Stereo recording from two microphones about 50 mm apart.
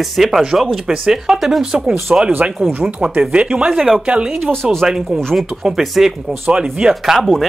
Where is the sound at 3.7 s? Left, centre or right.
Centre.